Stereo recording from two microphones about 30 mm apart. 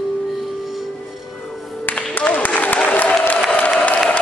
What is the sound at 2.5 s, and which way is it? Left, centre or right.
Applause, left.